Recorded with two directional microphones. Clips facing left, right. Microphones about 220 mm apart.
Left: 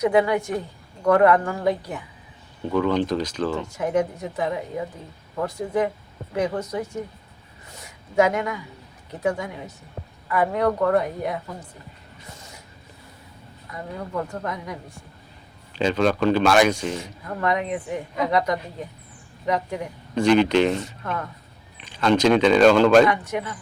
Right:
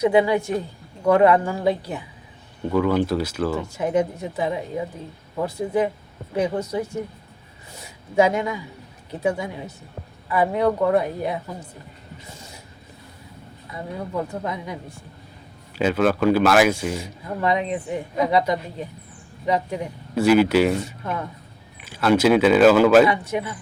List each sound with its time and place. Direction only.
0.0 s speech: 25° right (ahead or behind)
2.7 s a man's voice: 5° right (ahead or behind)
3.8 s a man's voice: 25° right (ahead or behind)
8.4 s a man's voice: 15° right (ahead or behind)
10.2 s a man's voice: 15° right (ahead or behind)
11.0 s speech: 25° right (ahead or behind)
13.7 s a man's voice: 10° right (ahead or behind)
15.7 s speech: 5° right (ahead or behind)
17.4 s speech: 25° right (ahead or behind)
18.3 s a man's voice: 10° right (ahead or behind)